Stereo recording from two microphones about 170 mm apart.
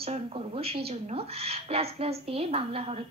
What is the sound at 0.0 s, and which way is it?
Speech, 35° right (ahead or behind).